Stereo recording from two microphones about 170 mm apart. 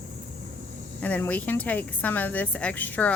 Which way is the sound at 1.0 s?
10° left (ahead or behind).